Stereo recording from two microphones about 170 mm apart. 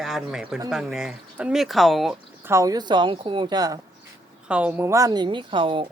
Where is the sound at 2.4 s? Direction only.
15° right (ahead or behind).